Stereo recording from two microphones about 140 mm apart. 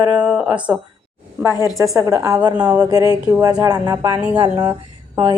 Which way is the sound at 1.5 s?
25° left (ahead or behind).